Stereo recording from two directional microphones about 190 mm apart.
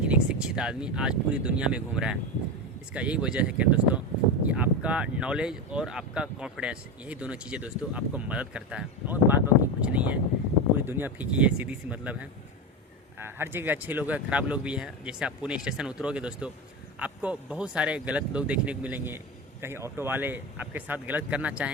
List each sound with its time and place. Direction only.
0.0 s speech: 5° right (ahead or behind)